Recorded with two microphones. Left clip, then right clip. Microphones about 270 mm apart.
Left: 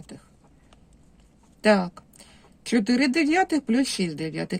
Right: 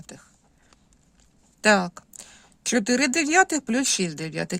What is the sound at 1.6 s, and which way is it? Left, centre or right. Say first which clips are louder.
Speech: right 1 dB; right.